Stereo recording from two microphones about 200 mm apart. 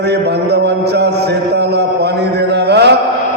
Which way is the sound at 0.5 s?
55° right (ahead or behind).